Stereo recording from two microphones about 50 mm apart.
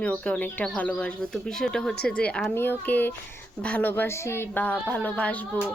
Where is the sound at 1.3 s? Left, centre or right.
Centre.